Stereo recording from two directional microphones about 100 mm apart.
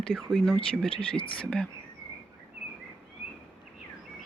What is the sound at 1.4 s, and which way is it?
Speech, 5° left (ahead or behind).